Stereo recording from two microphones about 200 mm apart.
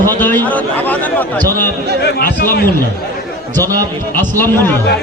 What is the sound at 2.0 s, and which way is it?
Speech, 55° left (ahead or behind).